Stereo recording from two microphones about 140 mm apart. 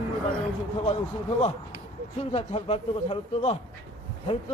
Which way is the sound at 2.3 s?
45° left (ahead or behind).